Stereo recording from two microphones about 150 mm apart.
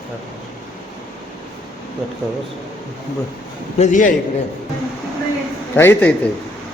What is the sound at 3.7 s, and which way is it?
Speech, 55° left (ahead or behind).